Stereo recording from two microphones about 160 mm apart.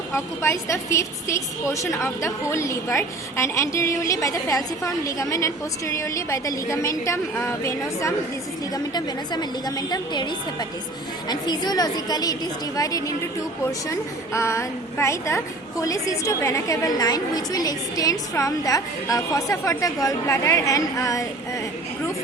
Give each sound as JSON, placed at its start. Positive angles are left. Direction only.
{"t": 0.1, "sound": "a woman's voice", "side_deg": 15}